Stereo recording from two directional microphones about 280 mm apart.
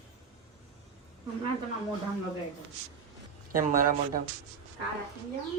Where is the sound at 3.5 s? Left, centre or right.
Right.